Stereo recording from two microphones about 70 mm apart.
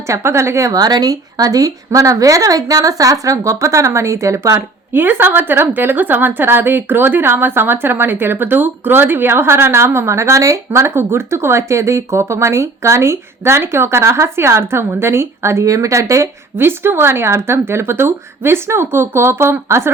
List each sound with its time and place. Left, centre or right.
0.1 s a woman's voice: right
0.7 s a woman's voice: right
4.5 s a woman's voice: right